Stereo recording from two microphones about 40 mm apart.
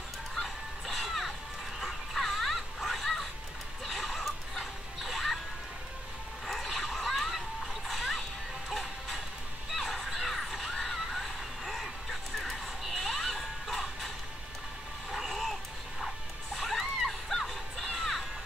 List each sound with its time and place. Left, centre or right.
0.4 s music: centre
6.4 s splash: centre
9.7 s a sound: centre
15.0 s vehicle: centre
16.5 s music: centre